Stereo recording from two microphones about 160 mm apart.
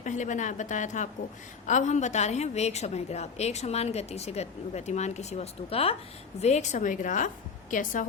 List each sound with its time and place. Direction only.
0.0 s a woman's voice: 50° left (ahead or behind)